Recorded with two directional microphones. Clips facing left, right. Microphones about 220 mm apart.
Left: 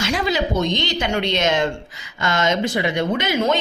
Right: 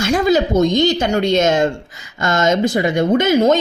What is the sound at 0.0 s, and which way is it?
Speech, 45° right (ahead or behind).